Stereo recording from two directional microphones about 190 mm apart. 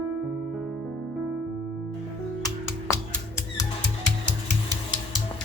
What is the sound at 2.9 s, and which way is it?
Music, 15° left (ahead or behind).